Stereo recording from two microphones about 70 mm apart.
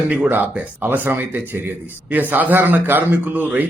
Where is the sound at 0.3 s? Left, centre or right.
Right.